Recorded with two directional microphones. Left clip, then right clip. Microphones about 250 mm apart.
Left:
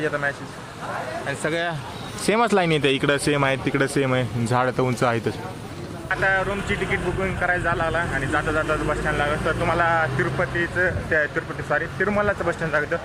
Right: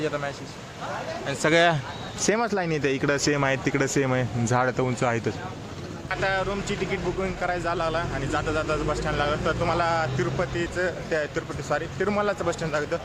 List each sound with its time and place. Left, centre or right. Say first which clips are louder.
0.0 s speech: left 4 dB; centre
1.3 s speech: right 6 dB; right
2.2 s speech: left 5 dB; centre
6.1 s speech: left 4 dB; centre